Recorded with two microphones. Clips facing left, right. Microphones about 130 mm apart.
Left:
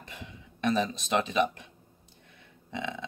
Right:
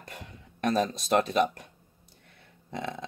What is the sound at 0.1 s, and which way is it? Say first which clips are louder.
Speech: right 1 dB; 45° right (ahead or behind).